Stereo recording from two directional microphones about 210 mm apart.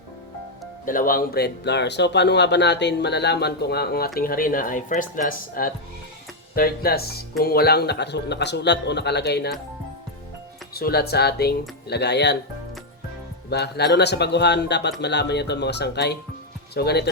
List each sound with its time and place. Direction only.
0.9 s speech: 40° left (ahead or behind)
10.8 s speech: 50° left (ahead or behind)
13.5 s speech: 50° left (ahead or behind)